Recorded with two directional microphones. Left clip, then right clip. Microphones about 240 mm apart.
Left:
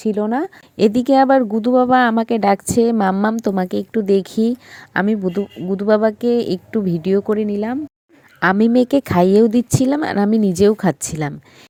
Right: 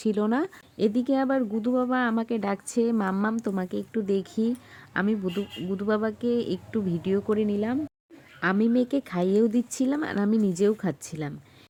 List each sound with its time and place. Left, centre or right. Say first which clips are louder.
0.0 s speech: left 7 dB; centre
0.8 s speech: left 12 dB; left